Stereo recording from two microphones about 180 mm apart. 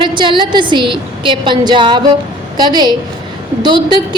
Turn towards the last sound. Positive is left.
turn(degrees=-25)  # may be behind; listen again after turning